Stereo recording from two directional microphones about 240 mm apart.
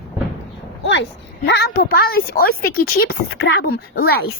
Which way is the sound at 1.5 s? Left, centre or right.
Left.